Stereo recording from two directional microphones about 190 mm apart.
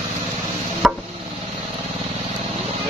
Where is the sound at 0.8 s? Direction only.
Centre (ahead or behind).